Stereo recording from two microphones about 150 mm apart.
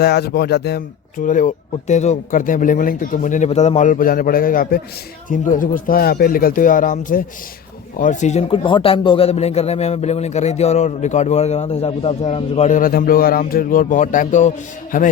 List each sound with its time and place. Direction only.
0.0 s speech: 90° left
1.2 s a man's voice: 60° left (ahead or behind)